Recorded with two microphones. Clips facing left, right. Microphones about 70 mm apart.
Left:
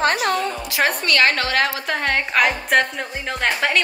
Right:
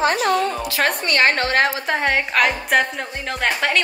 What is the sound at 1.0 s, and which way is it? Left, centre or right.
Speech, right.